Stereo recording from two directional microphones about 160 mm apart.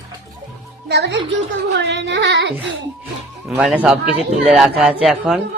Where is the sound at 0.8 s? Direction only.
90° right.